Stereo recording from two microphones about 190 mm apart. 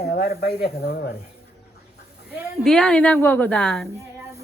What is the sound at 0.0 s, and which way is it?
Speech, 55° left (ahead or behind).